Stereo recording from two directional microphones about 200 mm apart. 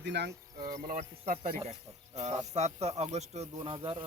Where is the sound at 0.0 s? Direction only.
60° right (ahead or behind).